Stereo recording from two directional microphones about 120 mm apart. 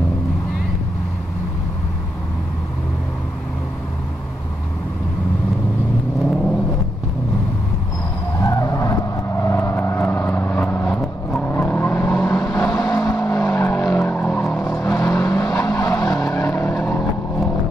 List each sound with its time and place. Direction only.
6.2 s vehicle: centre (ahead or behind)
8.4 s vehicle: 25° left (ahead or behind)
12.1 s vehicle: 5° left (ahead or behind)
12.6 s vehicle: 25° left (ahead or behind); by 14.6 s 10° left (ahead or behind)
15.0 s vehicle: 25° left (ahead or behind)